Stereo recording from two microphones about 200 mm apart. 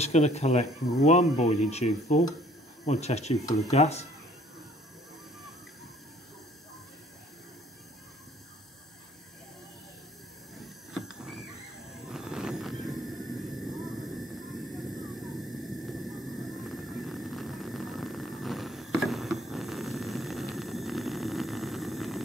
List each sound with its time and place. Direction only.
0.0 s speech: 35° left (ahead or behind)
10.6 s a sound: centre (ahead or behind)
11.9 s vehicle: centre (ahead or behind)